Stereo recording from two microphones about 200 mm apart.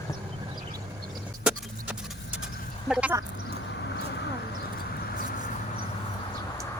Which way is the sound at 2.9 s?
5° right (ahead or behind).